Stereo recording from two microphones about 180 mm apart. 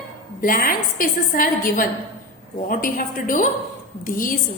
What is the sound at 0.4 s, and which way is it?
A woman's voice, 50° left (ahead or behind).